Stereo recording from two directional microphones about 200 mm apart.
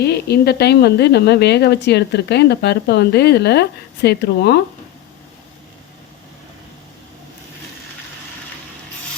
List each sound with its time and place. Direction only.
0.0 s speech: 55° left (ahead or behind)